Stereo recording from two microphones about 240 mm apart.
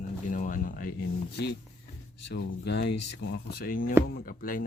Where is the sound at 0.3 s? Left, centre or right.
Left.